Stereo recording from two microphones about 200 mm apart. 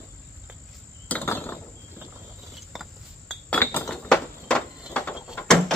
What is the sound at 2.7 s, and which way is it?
Chink, centre (ahead or behind).